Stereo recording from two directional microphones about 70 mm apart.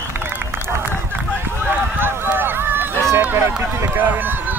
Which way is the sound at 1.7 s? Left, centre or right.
Right.